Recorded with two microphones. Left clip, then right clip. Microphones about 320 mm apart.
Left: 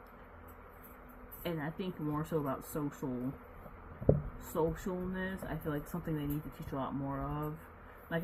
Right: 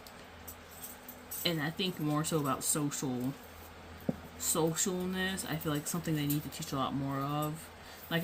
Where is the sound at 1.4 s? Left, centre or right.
Centre.